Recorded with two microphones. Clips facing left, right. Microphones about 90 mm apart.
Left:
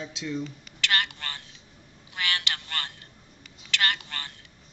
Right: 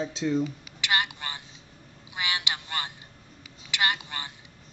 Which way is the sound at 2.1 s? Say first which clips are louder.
Even; 15° right (ahead or behind).